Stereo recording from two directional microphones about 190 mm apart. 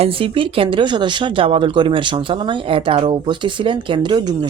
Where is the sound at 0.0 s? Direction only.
30° right (ahead or behind).